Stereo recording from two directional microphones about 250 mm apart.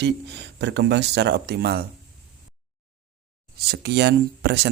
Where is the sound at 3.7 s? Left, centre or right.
Right.